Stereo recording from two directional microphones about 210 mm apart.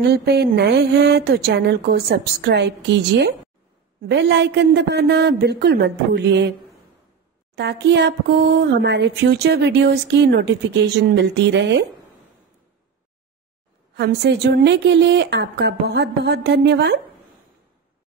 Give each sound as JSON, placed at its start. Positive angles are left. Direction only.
{"t": 0.0, "sound": "speech", "side_deg": -50}
{"t": 7.5, "sound": "speech", "side_deg": -55}
{"t": 13.9, "sound": "speech", "side_deg": -55}